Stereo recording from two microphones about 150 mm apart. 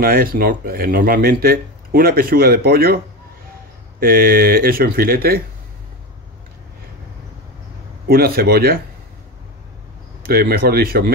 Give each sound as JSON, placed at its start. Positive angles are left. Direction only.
{"t": 0.0, "sound": "speech", "side_deg": -75}
{"t": 4.0, "sound": "speech", "side_deg": -80}
{"t": 8.1, "sound": "speech", "side_deg": -90}
{"t": 10.2, "sound": "speech", "side_deg": -90}